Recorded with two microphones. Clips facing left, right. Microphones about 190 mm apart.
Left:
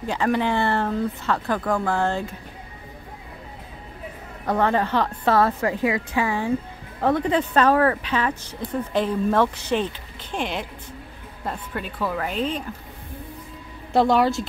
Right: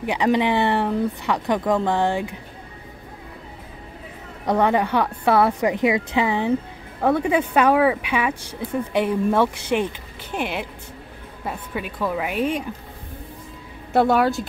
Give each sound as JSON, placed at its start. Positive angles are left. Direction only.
{"t": 0.0, "sound": "speech", "side_deg": -15}
{"t": 4.5, "sound": "speech", "side_deg": -15}
{"t": 7.0, "sound": "speech", "side_deg": -10}
{"t": 13.9, "sound": "speech", "side_deg": -5}